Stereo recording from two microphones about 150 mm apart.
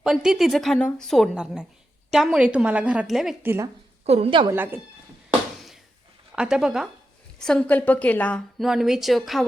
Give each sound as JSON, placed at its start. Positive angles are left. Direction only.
{"t": 0.0, "sound": "a woman's voice", "side_deg": -5}
{"t": 3.4, "sound": "a woman's voice", "side_deg": -15}
{"t": 4.0, "sound": "a woman's voice", "side_deg": -40}
{"t": 4.5, "sound": "a woman's voice", "side_deg": -15}
{"t": 5.5, "sound": "a sound", "side_deg": 0}
{"t": 6.3, "sound": "a woman's voice", "side_deg": -5}
{"t": 8.6, "sound": "a woman's voice", "side_deg": 0}